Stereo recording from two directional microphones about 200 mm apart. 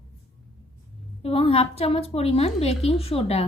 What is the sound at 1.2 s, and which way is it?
A woman's voice, 30° left (ahead or behind).